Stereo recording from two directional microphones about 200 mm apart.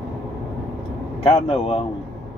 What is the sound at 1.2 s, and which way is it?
Speech, 30° left (ahead or behind).